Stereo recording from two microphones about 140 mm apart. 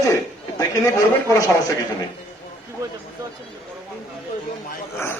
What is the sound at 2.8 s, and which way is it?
Speech, 20° right (ahead or behind).